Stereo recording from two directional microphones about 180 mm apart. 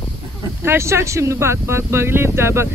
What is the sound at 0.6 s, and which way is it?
Speech, 15° right (ahead or behind).